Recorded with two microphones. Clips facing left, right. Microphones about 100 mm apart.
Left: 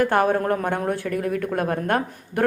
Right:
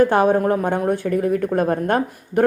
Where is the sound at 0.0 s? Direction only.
20° right (ahead or behind).